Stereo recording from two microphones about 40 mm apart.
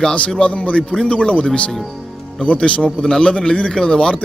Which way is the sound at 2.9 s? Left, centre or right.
Centre.